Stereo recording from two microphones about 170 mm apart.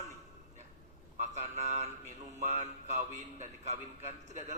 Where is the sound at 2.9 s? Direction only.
45° right (ahead or behind).